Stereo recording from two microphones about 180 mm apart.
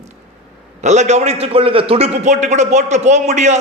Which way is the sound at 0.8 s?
40° right (ahead or behind).